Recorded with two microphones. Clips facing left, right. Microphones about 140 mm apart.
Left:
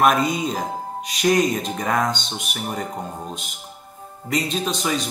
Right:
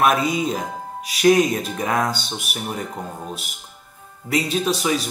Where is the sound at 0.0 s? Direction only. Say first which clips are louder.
Even; centre (ahead or behind).